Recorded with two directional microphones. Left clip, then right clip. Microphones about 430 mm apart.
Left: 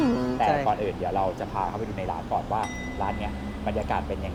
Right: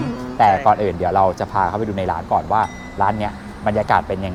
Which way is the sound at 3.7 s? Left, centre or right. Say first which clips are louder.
Right 12 dB; right.